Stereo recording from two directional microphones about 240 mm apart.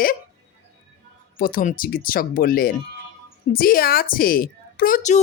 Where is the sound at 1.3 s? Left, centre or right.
Left.